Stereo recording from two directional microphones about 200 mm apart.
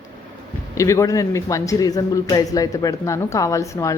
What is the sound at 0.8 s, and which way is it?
A man's voice, 15° left (ahead or behind).